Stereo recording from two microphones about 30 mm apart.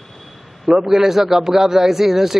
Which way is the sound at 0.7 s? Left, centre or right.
Centre.